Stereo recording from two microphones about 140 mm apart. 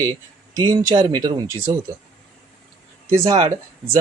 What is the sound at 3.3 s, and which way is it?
Speech, 25° right (ahead or behind).